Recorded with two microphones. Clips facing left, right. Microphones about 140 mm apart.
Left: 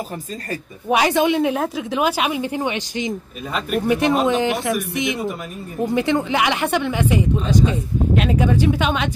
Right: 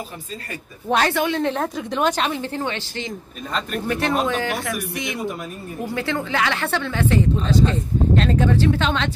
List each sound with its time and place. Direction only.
0.8 s a woman's voice: 10° left (ahead or behind)